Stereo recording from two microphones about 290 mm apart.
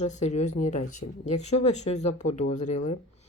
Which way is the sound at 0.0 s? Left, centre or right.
Left.